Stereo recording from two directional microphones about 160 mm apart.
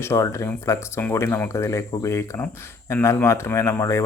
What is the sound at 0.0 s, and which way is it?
Speech, 15° left (ahead or behind).